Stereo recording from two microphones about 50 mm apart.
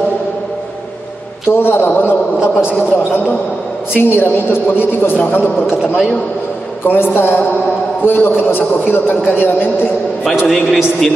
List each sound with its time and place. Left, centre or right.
1.5 s a man's voice: left
3.9 s a woman's voice: left
5.7 s a man's voice: centre
6.9 s a man's voice: left
10.4 s a man's voice: centre